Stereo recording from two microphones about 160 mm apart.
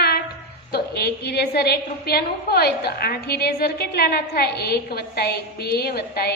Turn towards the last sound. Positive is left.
turn(degrees=75)  # may be behind; listen again after turning